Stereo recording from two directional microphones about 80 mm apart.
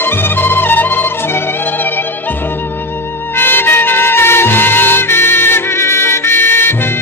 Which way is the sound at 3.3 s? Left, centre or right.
Left.